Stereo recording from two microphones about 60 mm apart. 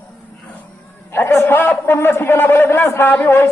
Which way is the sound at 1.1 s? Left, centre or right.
Left.